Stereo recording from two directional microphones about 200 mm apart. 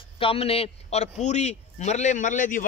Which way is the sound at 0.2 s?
30° left (ahead or behind).